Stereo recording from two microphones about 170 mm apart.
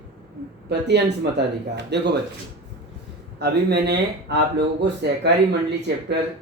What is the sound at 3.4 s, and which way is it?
Speech, 75° right (ahead or behind).